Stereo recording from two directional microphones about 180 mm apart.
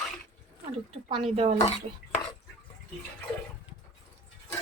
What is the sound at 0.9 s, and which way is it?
Speech, 35° right (ahead or behind).